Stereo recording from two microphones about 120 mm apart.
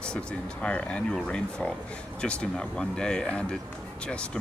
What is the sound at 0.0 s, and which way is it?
Speech, 10° left (ahead or behind).